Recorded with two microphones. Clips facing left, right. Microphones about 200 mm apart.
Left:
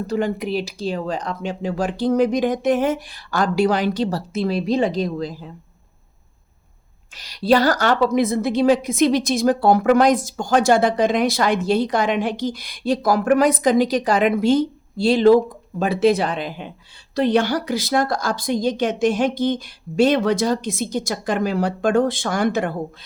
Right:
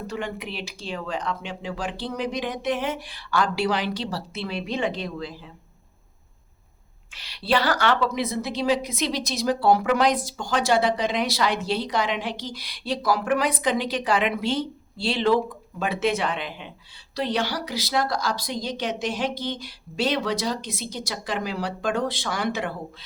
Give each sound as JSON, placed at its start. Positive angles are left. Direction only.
{"t": 0.1, "sound": "a woman's voice", "side_deg": 40}
{"t": 7.1, "sound": "a woman's voice", "side_deg": 40}